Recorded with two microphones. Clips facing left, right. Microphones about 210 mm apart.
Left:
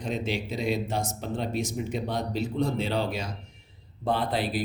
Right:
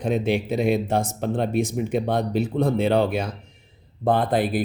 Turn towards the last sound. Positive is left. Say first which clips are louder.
# right 6 dB
turn(degrees=-50)  # may be behind; listen again after turning